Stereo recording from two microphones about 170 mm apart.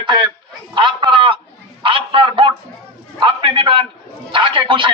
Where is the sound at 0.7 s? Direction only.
30° right (ahead or behind).